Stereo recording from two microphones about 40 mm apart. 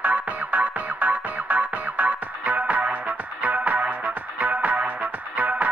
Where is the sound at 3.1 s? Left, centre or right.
Right.